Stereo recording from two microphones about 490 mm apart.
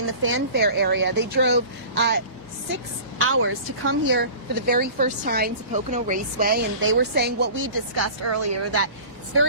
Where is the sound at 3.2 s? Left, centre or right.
Right.